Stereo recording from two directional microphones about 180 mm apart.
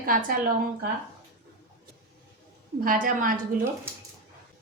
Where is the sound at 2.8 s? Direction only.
50° right (ahead or behind).